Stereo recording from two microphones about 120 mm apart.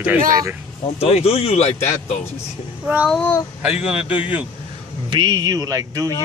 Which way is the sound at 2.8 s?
10° right (ahead or behind).